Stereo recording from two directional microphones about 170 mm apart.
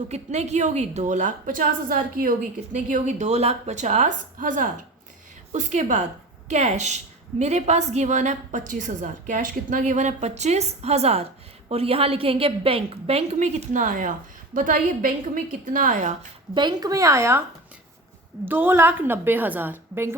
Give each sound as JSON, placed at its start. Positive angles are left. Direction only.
{"t": 0.1, "sound": "a woman's voice", "side_deg": -40}
{"t": 16.6, "sound": "speech", "side_deg": -25}
{"t": 18.4, "sound": "a woman's voice", "side_deg": -10}